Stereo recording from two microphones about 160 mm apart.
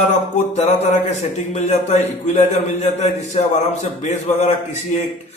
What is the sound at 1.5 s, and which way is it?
A man's voice, 45° left (ahead or behind).